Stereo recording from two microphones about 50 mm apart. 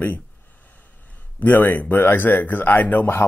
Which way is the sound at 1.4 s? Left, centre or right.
Left.